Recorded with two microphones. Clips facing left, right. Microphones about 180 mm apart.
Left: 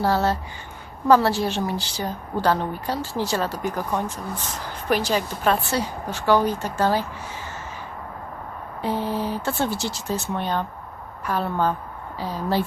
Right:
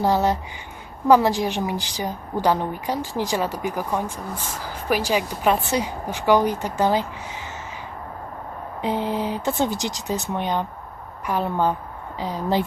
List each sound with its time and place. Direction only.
0.0 s a woman's voice: 15° right (ahead or behind)
8.8 s a woman's voice: 15° right (ahead or behind)